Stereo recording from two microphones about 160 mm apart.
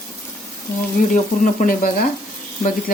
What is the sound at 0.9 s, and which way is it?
Speech, 55° left (ahead or behind).